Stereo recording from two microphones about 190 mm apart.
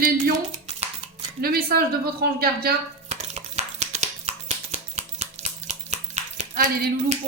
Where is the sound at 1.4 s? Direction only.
55° right (ahead or behind).